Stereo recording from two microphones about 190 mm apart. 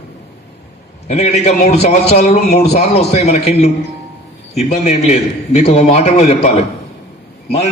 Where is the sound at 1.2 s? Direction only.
35° left (ahead or behind).